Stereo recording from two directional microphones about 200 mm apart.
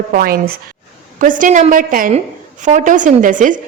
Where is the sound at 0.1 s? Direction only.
45° right (ahead or behind).